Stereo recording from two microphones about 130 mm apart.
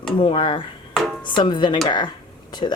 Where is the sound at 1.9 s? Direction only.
35° left (ahead or behind).